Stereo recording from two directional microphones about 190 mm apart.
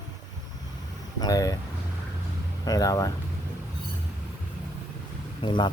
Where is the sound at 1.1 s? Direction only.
20° left (ahead or behind).